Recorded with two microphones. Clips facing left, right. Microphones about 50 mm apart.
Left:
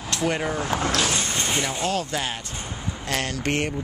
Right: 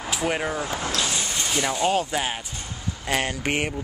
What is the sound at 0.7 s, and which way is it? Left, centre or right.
Speech, left.